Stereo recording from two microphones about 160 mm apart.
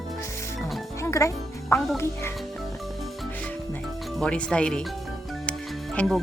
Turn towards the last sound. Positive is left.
turn(degrees=5)  # may be behind; listen again after turning